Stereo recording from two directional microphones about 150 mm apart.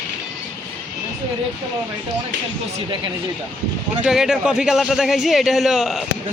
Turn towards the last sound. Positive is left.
turn(degrees=0)  # may be behind; listen again after turning